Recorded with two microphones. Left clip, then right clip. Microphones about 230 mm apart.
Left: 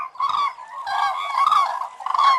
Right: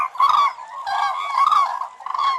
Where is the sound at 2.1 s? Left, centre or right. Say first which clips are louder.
Left 4 dB; centre.